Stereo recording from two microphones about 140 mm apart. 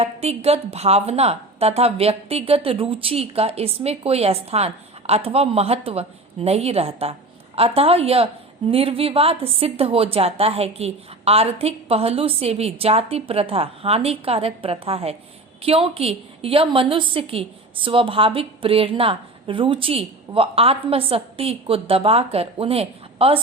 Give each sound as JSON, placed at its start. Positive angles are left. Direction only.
{"t": 0.0, "sound": "a woman's voice", "side_deg": -50}